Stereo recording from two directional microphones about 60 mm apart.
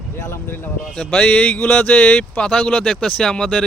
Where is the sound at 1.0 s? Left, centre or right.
Centre.